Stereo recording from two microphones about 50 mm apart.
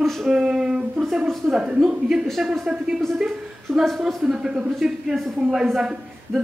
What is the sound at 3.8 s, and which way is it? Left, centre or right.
Speech, centre.